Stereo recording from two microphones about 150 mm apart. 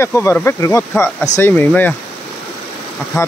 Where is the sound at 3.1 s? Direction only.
20° left (ahead or behind).